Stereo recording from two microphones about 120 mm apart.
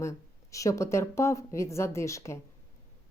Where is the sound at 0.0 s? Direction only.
25° left (ahead or behind).